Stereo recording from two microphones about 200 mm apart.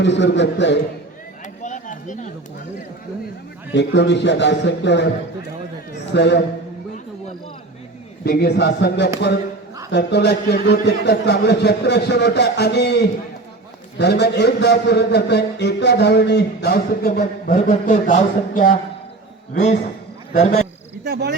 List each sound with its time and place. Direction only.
0.0 s a man's voice: 60° left (ahead or behind)
1.6 s a sound: 40° left (ahead or behind)
3.7 s a man's voice: 60° left (ahead or behind)
8.2 s a man's voice: 50° left (ahead or behind)
14.0 s a man's voice: 55° left (ahead or behind); by 18.8 s 40° left (ahead or behind)
20.4 s a man's voice: 30° left (ahead or behind)
21.0 s speech: 55° right (ahead or behind)